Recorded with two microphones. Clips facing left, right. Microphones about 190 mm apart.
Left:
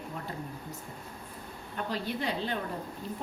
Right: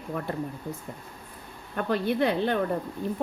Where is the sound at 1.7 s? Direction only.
60° right (ahead or behind).